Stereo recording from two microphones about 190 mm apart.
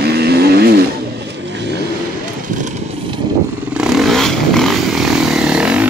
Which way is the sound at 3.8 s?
Centre (ahead or behind).